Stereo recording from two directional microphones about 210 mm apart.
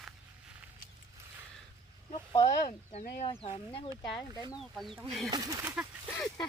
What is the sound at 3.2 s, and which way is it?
Speech, 25° left (ahead or behind).